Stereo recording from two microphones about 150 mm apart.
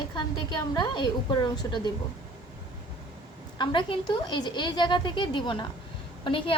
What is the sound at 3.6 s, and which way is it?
A woman's voice, 30° left (ahead or behind).